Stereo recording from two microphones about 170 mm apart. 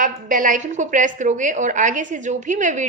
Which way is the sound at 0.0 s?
50° right (ahead or behind).